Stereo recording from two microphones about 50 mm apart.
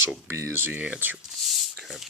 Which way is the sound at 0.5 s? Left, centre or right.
Right.